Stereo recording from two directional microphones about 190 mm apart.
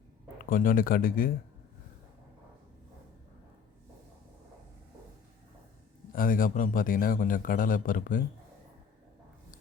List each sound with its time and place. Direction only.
0.4 s a man's voice: 45° left (ahead or behind)
6.1 s a man's voice: 45° left (ahead or behind)